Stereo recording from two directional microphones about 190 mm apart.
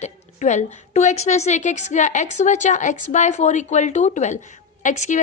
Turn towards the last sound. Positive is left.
turn(degrees=40)  # may be behind; listen again after turning